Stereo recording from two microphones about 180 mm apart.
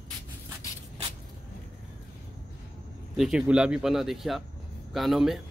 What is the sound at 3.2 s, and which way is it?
Speech, 5° right (ahead or behind).